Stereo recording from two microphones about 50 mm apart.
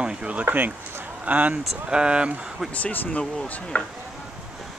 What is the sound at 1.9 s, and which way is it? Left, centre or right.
Speech, centre.